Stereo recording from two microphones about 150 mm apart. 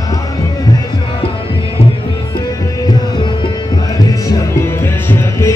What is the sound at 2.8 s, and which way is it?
Music, 30° left (ahead or behind).